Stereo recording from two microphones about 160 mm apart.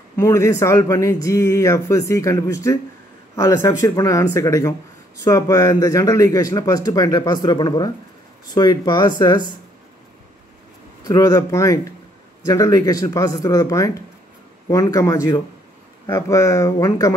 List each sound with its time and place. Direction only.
0.2 s speech: 20° left (ahead or behind)
11.1 s speech: 20° left (ahead or behind)